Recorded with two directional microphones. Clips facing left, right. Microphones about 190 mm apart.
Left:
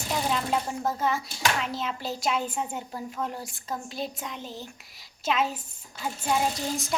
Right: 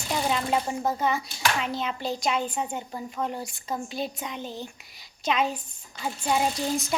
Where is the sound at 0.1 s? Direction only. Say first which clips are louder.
Right 2 dB; 5° right (ahead or behind).